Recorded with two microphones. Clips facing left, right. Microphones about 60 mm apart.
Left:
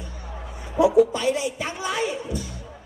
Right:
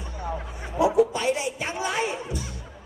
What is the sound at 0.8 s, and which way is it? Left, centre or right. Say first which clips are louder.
A man's voice: left 3 dB; right.